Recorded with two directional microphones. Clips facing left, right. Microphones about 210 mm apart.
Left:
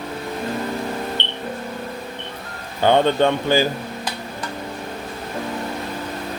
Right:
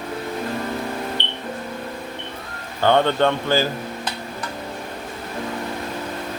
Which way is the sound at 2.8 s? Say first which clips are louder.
Left 1 dB; 15° left (ahead or behind).